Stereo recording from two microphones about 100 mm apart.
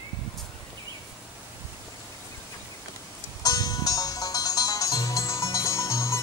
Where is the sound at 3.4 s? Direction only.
40° left (ahead or behind).